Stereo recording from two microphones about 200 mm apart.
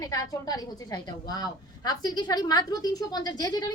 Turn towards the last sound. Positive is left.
turn(degrees=20)  # may be behind; listen again after turning